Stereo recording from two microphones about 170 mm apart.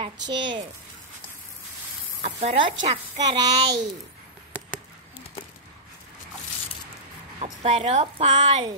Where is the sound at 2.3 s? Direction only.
35° right (ahead or behind).